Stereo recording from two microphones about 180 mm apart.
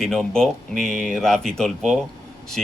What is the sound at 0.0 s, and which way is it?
Speech, 5° left (ahead or behind).